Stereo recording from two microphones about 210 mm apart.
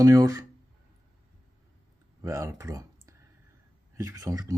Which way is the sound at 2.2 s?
15° right (ahead or behind).